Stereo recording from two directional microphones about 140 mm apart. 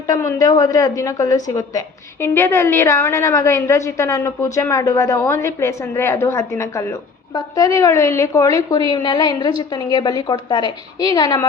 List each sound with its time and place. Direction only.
0.1 s a woman's voice: 25° left (ahead or behind)